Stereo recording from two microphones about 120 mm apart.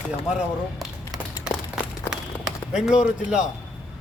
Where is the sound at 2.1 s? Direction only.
5° right (ahead or behind).